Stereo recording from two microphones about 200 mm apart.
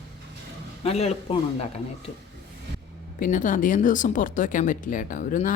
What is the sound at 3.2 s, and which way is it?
Speech, 40° left (ahead or behind).